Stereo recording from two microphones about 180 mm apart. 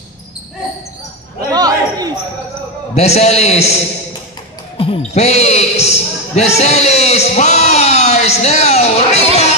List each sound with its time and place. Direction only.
1.5 s basketball bounce: 20° right (ahead or behind)
2.9 s a man's voice: 35° left (ahead or behind)